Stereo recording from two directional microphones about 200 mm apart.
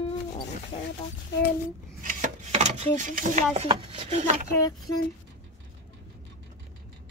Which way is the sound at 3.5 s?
25° right (ahead or behind).